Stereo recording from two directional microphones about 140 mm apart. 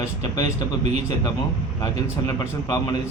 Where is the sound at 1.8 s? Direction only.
25° left (ahead or behind).